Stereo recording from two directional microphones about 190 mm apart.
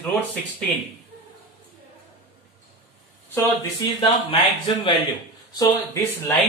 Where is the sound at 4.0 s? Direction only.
25° left (ahead or behind).